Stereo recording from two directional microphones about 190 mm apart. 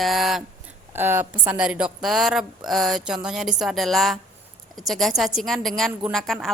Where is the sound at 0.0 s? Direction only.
Centre (ahead or behind).